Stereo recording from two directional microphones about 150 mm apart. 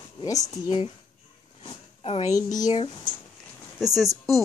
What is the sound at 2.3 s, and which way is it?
Speech, 25° left (ahead or behind).